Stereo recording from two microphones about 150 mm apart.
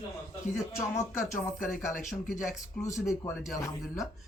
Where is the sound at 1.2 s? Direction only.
65° left (ahead or behind).